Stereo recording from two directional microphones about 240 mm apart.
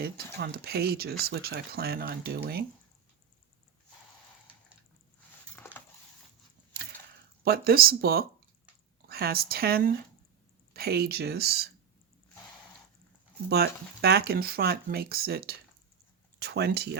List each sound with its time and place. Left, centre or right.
0.3 s speech: right
7.4 s speech: right
13.5 s speech: right